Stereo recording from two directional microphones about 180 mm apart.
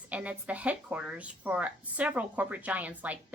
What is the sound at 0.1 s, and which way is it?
A woman's voice, 10° right (ahead or behind).